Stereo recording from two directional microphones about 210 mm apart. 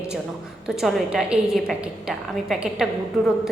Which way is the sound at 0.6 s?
Centre (ahead or behind).